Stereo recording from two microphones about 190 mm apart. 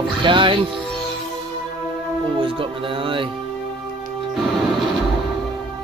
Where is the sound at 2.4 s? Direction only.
25° right (ahead or behind).